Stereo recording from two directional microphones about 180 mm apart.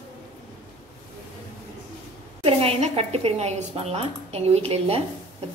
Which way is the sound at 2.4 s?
30° right (ahead or behind).